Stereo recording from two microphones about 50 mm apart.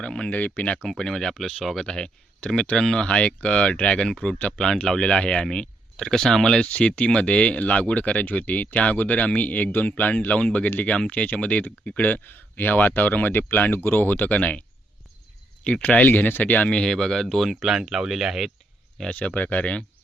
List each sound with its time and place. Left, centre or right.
0.0 s speech: centre
0.3 s speech: left
0.9 s speech: centre
6.7 s speech: left
12.1 s speech: left
15.6 s speech: left
16.6 s speech: centre
17.5 s speech: centre
19.1 s speech: left